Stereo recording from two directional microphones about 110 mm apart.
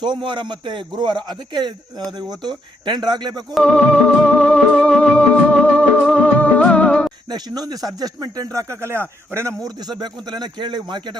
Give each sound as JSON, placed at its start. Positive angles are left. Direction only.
{"t": 0.0, "sound": "a man's voice", "side_deg": -45}
{"t": 3.5, "sound": "music", "side_deg": 5}
{"t": 7.3, "sound": "speech", "side_deg": -35}
{"t": 9.6, "sound": "speech", "side_deg": -40}